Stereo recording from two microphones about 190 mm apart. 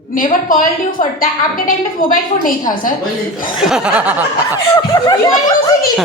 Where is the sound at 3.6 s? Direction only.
5° right (ahead or behind).